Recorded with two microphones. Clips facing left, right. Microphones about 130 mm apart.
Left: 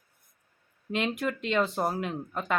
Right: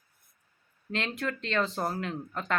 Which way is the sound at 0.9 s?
15° left (ahead or behind).